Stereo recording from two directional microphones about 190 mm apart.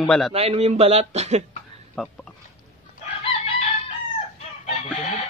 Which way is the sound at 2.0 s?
Centre (ahead or behind).